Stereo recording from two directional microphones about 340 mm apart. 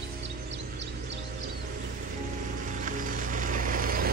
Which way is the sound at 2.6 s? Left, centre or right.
Right.